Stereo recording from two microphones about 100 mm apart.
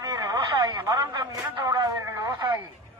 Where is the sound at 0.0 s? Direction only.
40° right (ahead or behind).